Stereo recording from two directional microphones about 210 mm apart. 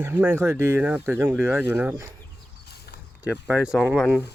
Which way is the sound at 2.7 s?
50° left (ahead or behind).